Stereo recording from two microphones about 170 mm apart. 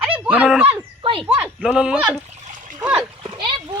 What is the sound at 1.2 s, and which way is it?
Speech, 5° right (ahead or behind).